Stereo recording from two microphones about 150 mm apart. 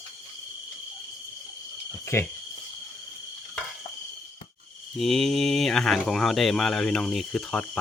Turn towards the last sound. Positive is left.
turn(degrees=5)  # may be behind; listen again after turning